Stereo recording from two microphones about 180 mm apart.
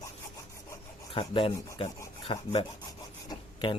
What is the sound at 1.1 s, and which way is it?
Speech, 30° left (ahead or behind).